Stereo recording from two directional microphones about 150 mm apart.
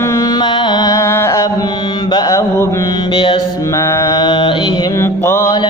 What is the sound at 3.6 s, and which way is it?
Mantra, 20° left (ahead or behind).